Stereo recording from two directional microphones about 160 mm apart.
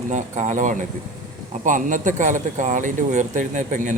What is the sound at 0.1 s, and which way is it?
Speech, 50° right (ahead or behind).